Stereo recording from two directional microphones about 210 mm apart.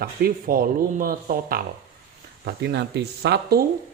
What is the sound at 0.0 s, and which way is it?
A man's voice, 45° right (ahead or behind).